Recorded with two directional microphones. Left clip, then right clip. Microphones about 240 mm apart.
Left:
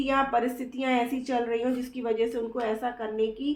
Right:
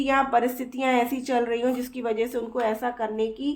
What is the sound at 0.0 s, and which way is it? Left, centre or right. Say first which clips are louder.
A woman's voice: right 3 dB; right.